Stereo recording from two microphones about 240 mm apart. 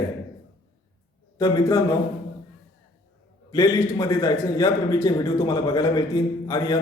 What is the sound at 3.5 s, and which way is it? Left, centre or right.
A man's voice, centre.